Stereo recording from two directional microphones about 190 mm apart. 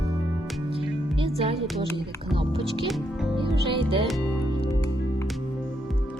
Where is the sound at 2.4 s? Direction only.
30° right (ahead or behind).